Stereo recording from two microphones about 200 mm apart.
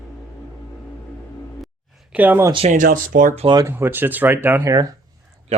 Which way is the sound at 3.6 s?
10° right (ahead or behind).